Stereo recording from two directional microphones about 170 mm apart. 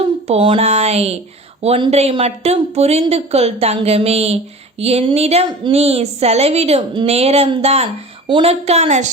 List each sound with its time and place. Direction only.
0.3 s a woman's voice: 35° right (ahead or behind)